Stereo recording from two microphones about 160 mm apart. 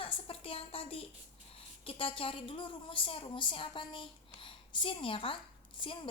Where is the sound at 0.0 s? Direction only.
35° left (ahead or behind).